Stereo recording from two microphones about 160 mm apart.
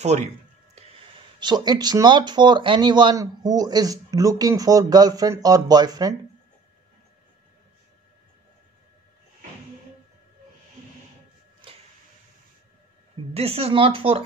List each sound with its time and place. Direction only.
0.0 s speech: 45° right (ahead or behind)
1.4 s speech: 25° right (ahead or behind)
11.6 s printer: 35° right (ahead or behind)
13.3 s speech: 40° right (ahead or behind)